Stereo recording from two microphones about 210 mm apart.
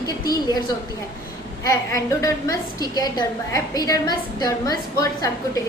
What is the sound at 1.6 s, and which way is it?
A woman's voice, 15° left (ahead or behind).